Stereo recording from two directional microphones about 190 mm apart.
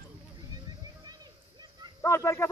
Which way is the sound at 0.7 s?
20° right (ahead or behind).